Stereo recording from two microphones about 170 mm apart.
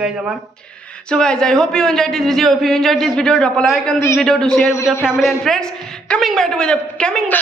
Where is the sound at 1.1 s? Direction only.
5° left (ahead or behind).